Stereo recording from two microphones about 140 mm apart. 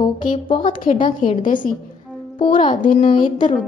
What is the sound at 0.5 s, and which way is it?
Music, 35° left (ahead or behind).